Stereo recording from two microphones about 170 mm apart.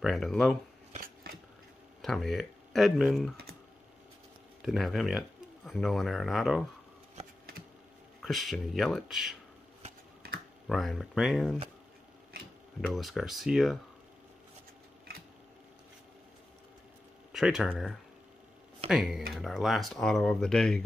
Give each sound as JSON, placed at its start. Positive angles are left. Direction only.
{"t": 0.0, "sound": "speech", "side_deg": 0}
{"t": 0.9, "sound": "scissors", "side_deg": -60}
{"t": 2.0, "sound": "speech", "side_deg": 0}
{"t": 4.6, "sound": "speech", "side_deg": 0}
{"t": 8.2, "sound": "speech", "side_deg": 0}
{"t": 10.7, "sound": "speech", "side_deg": 0}
{"t": 12.8, "sound": "speech", "side_deg": 0}
{"t": 17.3, "sound": "speech", "side_deg": 0}